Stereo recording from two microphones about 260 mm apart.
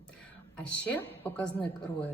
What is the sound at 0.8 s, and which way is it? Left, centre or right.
Speech, centre.